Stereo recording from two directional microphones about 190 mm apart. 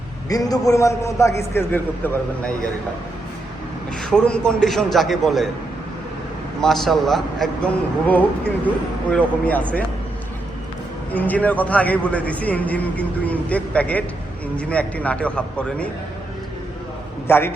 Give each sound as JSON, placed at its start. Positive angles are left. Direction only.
{"t": 0.3, "sound": "a man's voice", "side_deg": 20}
{"t": 4.0, "sound": "a man's voice", "side_deg": 5}
{"t": 6.6, "sound": "a man's voice", "side_deg": 0}
{"t": 11.1, "sound": "a man's voice", "side_deg": 10}
{"t": 17.2, "sound": "a man's voice", "side_deg": 10}